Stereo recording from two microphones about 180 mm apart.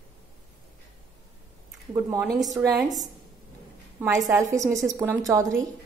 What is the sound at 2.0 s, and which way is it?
Speech, 15° right (ahead or behind).